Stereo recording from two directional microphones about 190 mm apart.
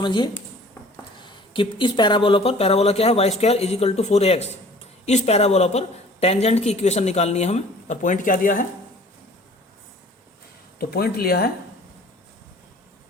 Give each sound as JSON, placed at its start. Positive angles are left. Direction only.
{"t": 0.0, "sound": "a woman's voice", "side_deg": 25}
{"t": 10.8, "sound": "speech", "side_deg": 55}